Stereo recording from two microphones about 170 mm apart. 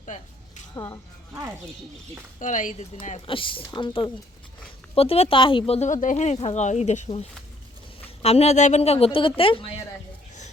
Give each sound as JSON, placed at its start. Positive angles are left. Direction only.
{"t": 0.0, "sound": "a sound", "side_deg": 45}
{"t": 2.4, "sound": "speech", "side_deg": 50}
{"t": 3.2, "sound": "speech", "side_deg": 30}